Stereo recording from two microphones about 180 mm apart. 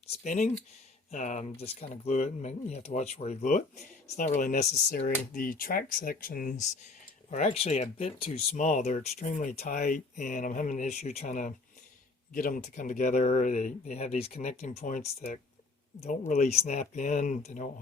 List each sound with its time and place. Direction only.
0.3 s speech: 40° left (ahead or behind)
4.9 s speech: 55° left (ahead or behind)